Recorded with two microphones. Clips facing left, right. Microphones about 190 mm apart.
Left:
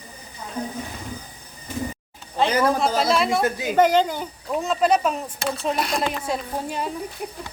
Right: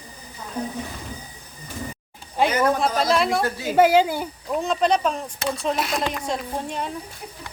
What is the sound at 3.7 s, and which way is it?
Speech, 10° right (ahead or behind).